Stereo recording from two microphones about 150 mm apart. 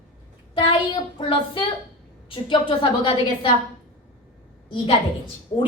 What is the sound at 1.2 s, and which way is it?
A woman's voice, 35° left (ahead or behind).